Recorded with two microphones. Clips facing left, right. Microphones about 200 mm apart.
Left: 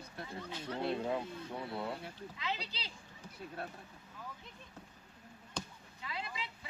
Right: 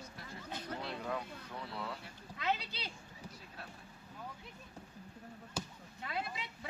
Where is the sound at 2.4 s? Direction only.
55° right (ahead or behind).